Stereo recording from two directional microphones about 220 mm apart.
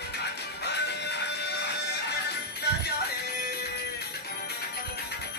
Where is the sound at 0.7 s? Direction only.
50° left (ahead or behind).